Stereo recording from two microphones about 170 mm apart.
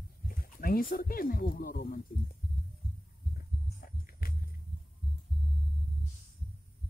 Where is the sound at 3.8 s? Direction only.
60° left (ahead or behind).